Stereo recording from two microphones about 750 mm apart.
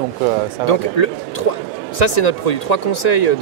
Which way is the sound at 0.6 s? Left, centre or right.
Left.